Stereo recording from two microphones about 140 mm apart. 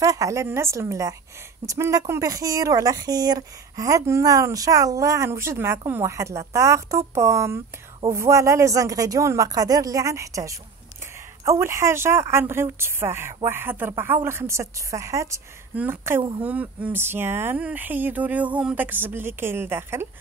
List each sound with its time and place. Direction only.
0.0 s speech: 25° right (ahead or behind)
16.2 s speech: 35° right (ahead or behind)
16.4 s speech: 10° right (ahead or behind)